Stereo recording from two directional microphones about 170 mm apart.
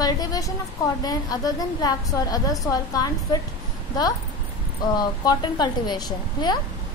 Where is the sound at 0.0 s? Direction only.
20° left (ahead or behind).